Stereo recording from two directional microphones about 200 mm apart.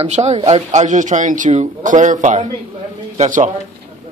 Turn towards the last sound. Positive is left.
turn(degrees=-40)  # may be behind; listen again after turning